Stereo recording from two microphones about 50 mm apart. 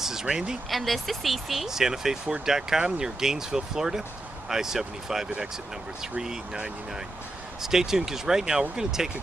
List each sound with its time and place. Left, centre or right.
0.0 s speech: centre
0.7 s speech: centre
6.1 s speech: centre